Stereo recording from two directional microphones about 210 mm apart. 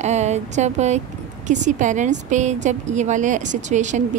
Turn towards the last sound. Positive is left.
turn(degrees=-35)  # may be behind; listen again after turning